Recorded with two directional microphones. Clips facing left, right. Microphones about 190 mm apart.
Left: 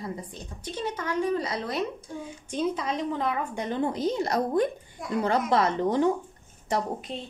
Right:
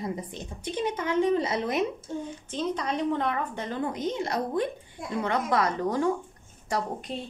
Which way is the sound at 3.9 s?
35° left (ahead or behind).